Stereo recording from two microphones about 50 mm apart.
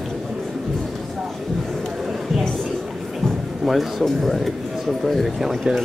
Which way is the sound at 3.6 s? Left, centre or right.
Centre.